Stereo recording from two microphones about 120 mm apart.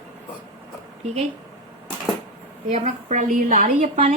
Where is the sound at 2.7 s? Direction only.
85° right.